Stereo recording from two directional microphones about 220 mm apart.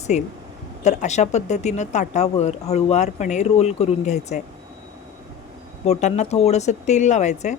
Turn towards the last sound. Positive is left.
turn(degrees=30)  # may be behind; listen again after turning